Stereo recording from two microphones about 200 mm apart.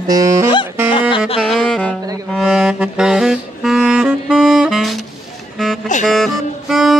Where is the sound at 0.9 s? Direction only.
25° left (ahead or behind).